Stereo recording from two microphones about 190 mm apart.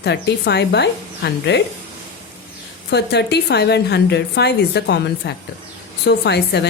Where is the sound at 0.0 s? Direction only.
65° left (ahead or behind).